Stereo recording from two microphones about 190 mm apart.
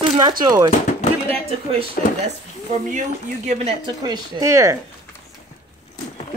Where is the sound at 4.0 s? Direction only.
20° right (ahead or behind).